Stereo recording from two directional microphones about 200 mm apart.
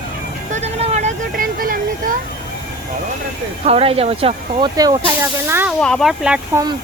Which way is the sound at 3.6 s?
30° right (ahead or behind).